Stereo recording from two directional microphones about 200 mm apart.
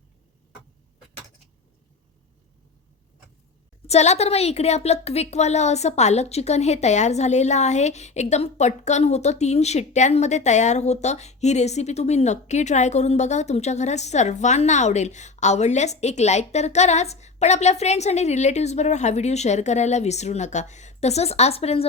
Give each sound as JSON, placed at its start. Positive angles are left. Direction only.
{"t": 3.8, "sound": "a woman's voice", "side_deg": 35}